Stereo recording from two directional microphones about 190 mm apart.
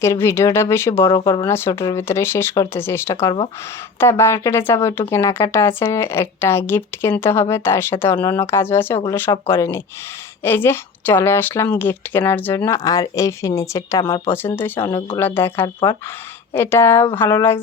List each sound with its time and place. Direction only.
0.0 s speech: 15° left (ahead or behind)
1.0 s speech: 25° left (ahead or behind)
14.8 s speech: 25° left (ahead or behind)
15.2 s speech: 10° left (ahead or behind)